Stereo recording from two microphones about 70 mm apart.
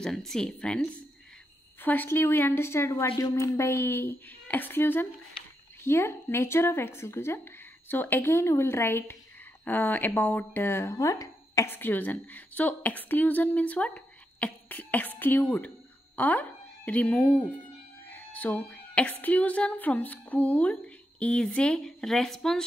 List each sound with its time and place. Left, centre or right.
0.0 s speech: centre
1.8 s a woman's voice: left
11.0 s speech: left
11.6 s a woman's voice: left; by 22.7 s centre